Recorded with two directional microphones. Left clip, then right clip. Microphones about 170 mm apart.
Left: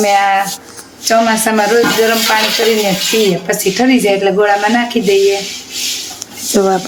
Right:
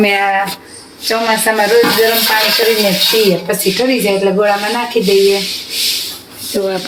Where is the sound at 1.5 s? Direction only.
15° left (ahead or behind).